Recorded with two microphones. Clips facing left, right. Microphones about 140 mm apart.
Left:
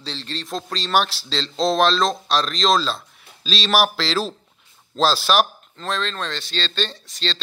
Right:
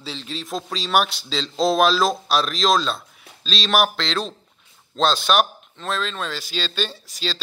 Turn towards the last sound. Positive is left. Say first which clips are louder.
# even
turn(degrees=-5)  # may be behind; listen again after turning